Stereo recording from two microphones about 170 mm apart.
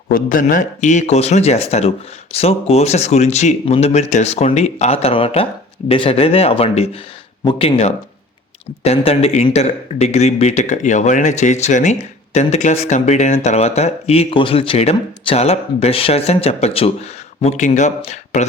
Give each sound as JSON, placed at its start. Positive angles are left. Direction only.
{"t": 0.1, "sound": "speech", "side_deg": 50}